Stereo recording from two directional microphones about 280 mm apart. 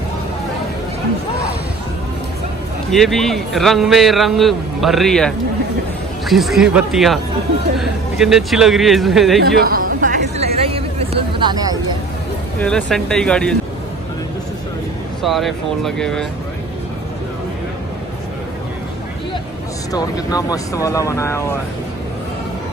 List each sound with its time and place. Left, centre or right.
2.9 s a man's voice: centre
9.4 s speech: right
9.9 s a sound: right
12.6 s a man's voice: centre
15.2 s a man's voice: centre
19.9 s speech: centre